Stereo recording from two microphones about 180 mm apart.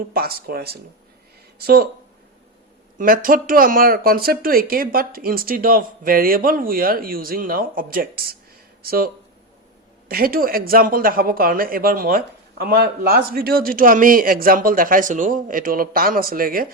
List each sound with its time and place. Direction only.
0.1 s speech: 55° right (ahead or behind)
3.0 s speech: 50° right (ahead or behind)